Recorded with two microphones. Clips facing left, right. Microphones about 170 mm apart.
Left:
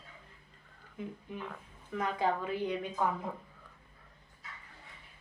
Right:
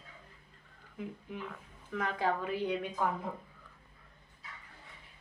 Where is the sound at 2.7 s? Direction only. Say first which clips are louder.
Even; centre (ahead or behind).